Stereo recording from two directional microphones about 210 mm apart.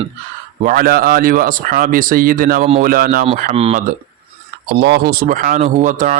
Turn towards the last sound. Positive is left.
turn(degrees=-40)  # may be behind; listen again after turning